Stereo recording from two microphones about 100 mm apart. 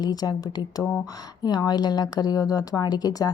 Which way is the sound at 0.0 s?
40° left (ahead or behind).